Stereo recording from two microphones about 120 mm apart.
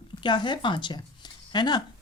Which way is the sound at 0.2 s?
40° left (ahead or behind).